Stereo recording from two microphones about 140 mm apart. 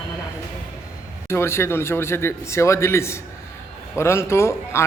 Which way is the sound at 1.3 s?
20° left (ahead or behind).